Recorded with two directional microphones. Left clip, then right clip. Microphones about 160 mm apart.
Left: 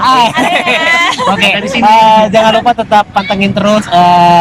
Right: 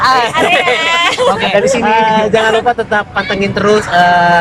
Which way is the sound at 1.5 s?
40° right (ahead or behind).